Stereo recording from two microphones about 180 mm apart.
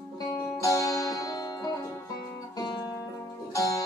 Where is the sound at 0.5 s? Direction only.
15° left (ahead or behind).